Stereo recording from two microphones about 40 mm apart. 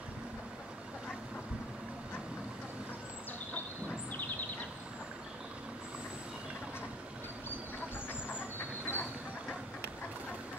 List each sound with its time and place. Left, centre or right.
8.1 s train: left